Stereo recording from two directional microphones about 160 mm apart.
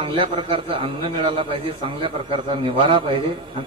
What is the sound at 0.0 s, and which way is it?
A man's voice, 35° right (ahead or behind).